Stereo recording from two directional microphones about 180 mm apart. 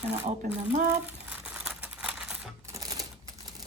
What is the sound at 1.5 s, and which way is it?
Typewriter, 5° right (ahead or behind).